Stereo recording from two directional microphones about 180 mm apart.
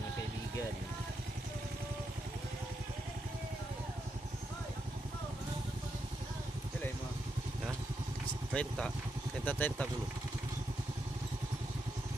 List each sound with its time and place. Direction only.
8.5 s speech: 5° left (ahead or behind)